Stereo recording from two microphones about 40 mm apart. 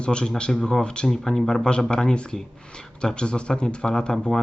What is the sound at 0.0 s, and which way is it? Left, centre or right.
Speech, left.